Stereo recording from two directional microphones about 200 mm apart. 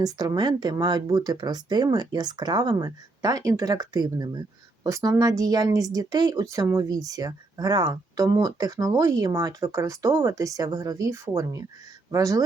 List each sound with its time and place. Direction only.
0.0 s speech: 20° right (ahead or behind)